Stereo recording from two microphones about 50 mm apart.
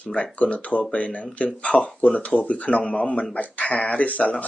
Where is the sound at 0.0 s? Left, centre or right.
Left.